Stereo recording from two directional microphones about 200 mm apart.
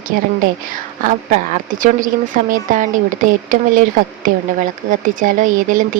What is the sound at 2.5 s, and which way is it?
Speech, 40° right (ahead or behind).